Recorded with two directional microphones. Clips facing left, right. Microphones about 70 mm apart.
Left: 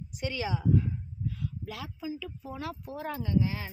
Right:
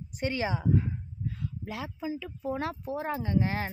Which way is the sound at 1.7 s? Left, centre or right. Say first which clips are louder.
Right 5 dB; right.